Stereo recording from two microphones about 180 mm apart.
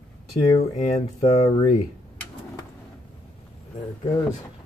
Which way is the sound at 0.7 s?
35° left (ahead or behind).